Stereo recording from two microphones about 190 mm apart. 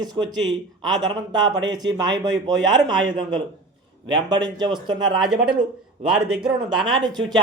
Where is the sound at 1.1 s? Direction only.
25° right (ahead or behind).